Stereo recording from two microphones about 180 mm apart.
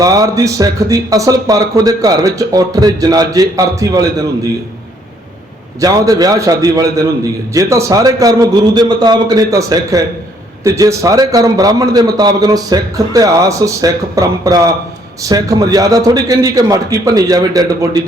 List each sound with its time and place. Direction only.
0.0 s speech: 20° right (ahead or behind)
5.8 s speech: 20° right (ahead or behind)